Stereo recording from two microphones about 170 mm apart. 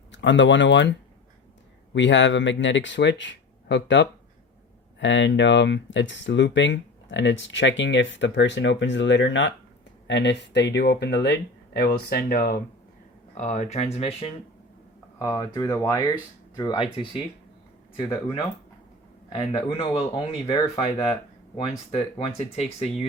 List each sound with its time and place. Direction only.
0.1 s speech: 90° left; by 12.6 s 60° left (ahead or behind)
13.3 s speech: 45° left (ahead or behind)
15.2 s speech: 20° left (ahead or behind)
22.4 s speech: 40° left (ahead or behind)